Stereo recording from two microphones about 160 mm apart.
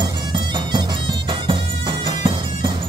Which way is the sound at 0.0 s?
25° right (ahead or behind).